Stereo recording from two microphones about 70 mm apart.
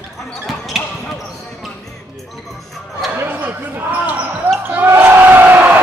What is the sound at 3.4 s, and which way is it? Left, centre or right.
Basketball bounce, right.